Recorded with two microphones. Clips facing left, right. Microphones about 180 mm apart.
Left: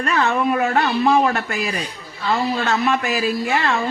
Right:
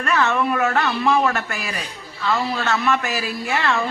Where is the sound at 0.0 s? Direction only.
35° left (ahead or behind).